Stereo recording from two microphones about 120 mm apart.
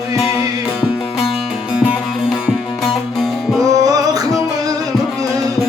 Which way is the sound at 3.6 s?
30° right (ahead or behind).